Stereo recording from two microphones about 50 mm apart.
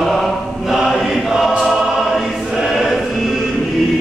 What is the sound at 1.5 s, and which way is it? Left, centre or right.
Choir, centre.